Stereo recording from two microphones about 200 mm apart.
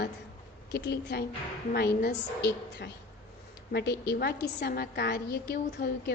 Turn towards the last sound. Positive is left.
turn(degrees=50)  # may be behind; listen again after turning